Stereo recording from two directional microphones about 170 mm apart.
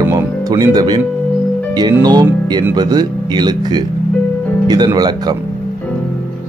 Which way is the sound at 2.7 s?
25° right (ahead or behind).